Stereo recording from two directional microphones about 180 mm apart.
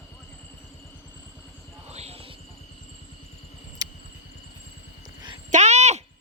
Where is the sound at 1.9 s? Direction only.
35° right (ahead or behind).